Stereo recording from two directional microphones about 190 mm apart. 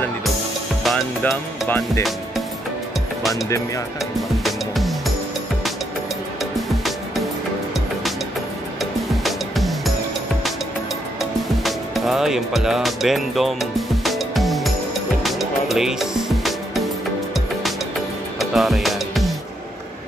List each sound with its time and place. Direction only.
0.8 s music: centre (ahead or behind)
3.4 s speech: 15° left (ahead or behind)
4.4 s music: centre (ahead or behind)
6.5 s music: centre (ahead or behind)
9.2 s music: centre (ahead or behind)
11.1 s music: centre (ahead or behind)
18.4 s music: centre (ahead or behind)